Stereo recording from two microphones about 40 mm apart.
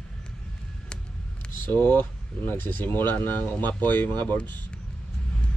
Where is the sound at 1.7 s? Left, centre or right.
Left.